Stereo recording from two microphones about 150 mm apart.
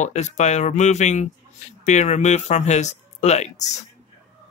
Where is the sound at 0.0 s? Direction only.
50° left (ahead or behind).